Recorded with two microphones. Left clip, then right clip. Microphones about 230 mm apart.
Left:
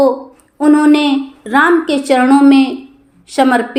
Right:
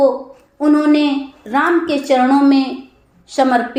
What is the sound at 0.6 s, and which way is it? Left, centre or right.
A woman's voice, left.